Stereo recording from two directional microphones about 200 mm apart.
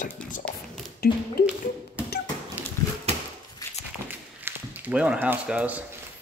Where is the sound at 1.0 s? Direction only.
50° left (ahead or behind).